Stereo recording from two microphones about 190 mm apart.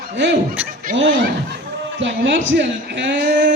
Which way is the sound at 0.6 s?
10° right (ahead or behind).